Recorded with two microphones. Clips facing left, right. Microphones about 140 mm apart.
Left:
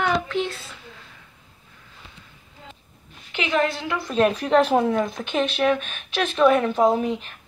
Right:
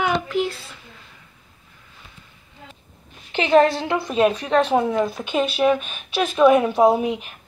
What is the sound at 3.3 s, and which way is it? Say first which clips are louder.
Speech: right 7 dB; 35° right (ahead or behind).